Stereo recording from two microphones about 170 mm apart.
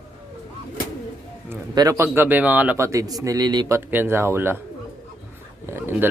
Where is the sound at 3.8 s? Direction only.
15° right (ahead or behind).